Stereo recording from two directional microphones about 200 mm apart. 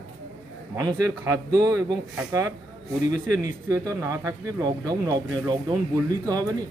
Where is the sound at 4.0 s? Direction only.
15° right (ahead or behind).